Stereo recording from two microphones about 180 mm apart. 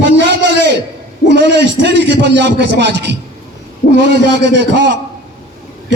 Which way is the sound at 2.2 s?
70° right (ahead or behind).